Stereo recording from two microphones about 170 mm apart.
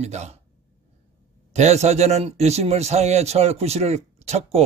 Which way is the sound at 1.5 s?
40° right (ahead or behind).